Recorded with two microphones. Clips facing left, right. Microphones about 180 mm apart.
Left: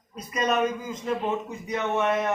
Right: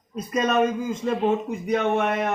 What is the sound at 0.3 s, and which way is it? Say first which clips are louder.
Speech: right 3 dB; 50° right (ahead or behind).